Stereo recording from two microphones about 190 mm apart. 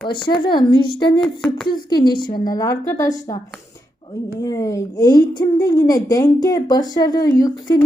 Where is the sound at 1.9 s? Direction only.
20° left (ahead or behind).